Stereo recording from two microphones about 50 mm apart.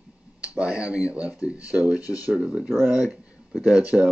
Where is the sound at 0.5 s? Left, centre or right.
Right.